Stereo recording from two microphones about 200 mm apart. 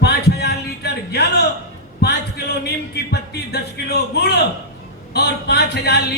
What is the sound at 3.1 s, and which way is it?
A man's voice, 55° left (ahead or behind).